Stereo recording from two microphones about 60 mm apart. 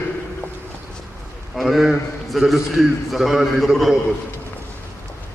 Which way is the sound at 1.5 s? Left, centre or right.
Centre.